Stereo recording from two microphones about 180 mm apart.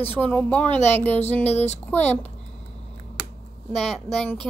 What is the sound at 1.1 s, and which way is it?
Speech, 40° left (ahead or behind).